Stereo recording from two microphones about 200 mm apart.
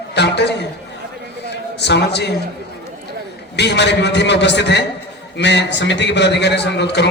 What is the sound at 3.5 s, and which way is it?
A man's voice, 60° left (ahead or behind).